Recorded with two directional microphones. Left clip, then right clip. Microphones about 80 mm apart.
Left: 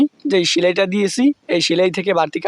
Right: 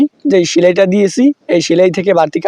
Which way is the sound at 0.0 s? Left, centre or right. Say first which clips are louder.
Right 5 dB; right.